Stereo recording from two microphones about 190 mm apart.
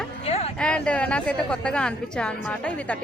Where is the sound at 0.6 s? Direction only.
5° left (ahead or behind).